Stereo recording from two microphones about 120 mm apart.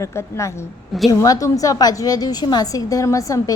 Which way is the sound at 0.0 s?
25° left (ahead or behind).